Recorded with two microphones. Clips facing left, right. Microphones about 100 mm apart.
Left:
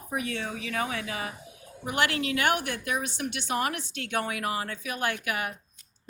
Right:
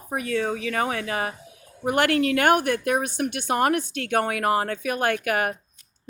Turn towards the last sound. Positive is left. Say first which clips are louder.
# right 7 dB
turn(degrees=-50)  # may be behind; listen again after turning